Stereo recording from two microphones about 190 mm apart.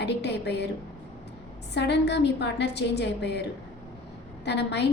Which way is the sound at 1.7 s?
65° left (ahead or behind).